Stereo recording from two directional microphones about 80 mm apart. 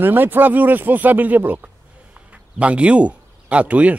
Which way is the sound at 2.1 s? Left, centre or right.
Centre.